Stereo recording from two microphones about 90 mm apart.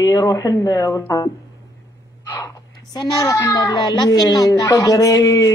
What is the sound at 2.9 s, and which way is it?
A child's voice, 45° left (ahead or behind).